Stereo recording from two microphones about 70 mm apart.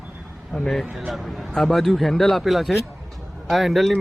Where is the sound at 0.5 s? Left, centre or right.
Centre.